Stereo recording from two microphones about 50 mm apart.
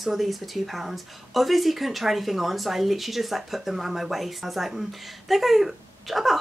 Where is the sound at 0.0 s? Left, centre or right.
Centre.